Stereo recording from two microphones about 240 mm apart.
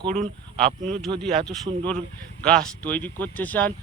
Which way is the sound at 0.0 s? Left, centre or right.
Right.